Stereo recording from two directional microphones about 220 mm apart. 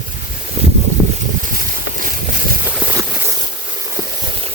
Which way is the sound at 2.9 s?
15° right (ahead or behind).